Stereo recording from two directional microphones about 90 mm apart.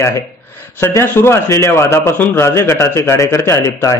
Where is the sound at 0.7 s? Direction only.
30° left (ahead or behind).